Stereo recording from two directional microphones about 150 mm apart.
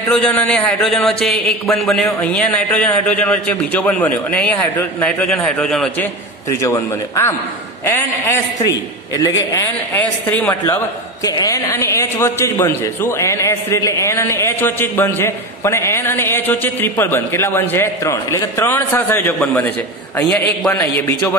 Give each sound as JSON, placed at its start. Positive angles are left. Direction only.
{"t": 0.1, "sound": "a man's voice", "side_deg": 10}
{"t": 6.5, "sound": "a man's voice", "side_deg": 20}
{"t": 10.3, "sound": "a man's voice", "side_deg": 10}